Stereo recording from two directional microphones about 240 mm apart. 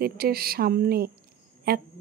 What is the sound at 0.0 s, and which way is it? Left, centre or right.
Speech, right.